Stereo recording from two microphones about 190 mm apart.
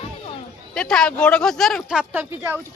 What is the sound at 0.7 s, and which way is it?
Speech, 5° left (ahead or behind).